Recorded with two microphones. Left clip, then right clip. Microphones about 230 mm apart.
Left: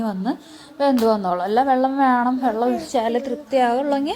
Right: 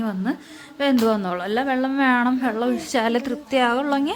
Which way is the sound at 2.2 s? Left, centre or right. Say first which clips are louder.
Left 1 dB; right.